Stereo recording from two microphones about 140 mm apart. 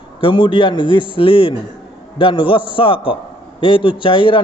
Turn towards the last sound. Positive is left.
turn(degrees=35)  # may be behind; listen again after turning